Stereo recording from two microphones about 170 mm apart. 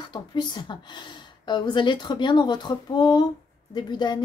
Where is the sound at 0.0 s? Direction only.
25° left (ahead or behind).